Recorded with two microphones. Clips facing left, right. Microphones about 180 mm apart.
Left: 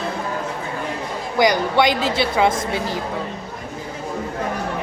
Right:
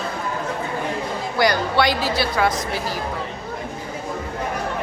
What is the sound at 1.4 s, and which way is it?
A woman's voice, 20° left (ahead or behind).